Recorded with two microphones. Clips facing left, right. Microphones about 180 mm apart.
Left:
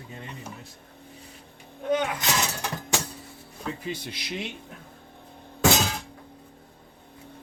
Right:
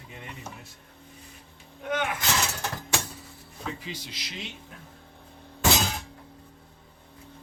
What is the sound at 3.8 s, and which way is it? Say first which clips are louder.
Speech: left 5 dB; 55° left (ahead or behind).